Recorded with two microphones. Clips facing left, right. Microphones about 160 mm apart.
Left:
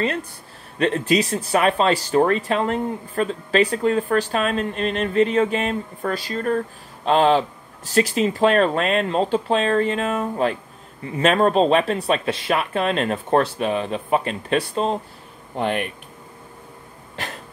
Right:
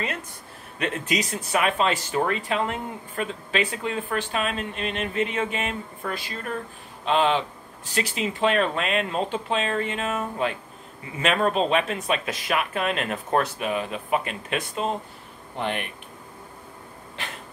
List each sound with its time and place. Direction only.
0.0 s speech: 30° left (ahead or behind)